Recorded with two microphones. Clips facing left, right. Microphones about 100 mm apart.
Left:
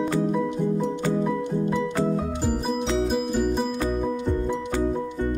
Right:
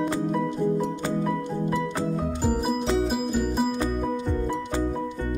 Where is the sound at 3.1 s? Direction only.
Centre (ahead or behind).